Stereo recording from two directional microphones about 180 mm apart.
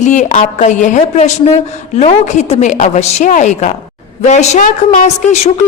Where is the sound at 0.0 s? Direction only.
40° left (ahead or behind).